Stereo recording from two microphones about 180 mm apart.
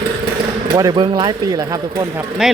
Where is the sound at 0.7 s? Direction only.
25° right (ahead or behind).